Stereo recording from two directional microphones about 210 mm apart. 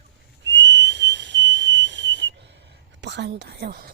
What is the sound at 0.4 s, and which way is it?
Whistle, 60° right (ahead or behind).